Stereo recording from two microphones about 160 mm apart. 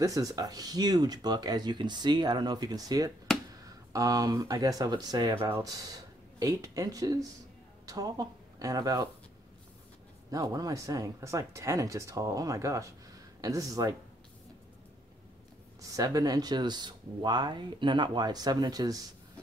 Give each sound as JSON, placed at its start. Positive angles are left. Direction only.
{"t": 0.0, "sound": "speech", "side_deg": -20}
{"t": 10.3, "sound": "speech", "side_deg": -25}
{"t": 15.8, "sound": "speech", "side_deg": -20}